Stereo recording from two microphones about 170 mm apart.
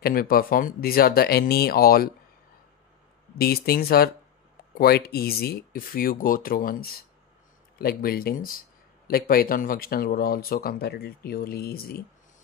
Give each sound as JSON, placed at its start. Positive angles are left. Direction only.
{"t": 0.0, "sound": "speech", "side_deg": 60}
{"t": 3.3, "sound": "speech", "side_deg": 65}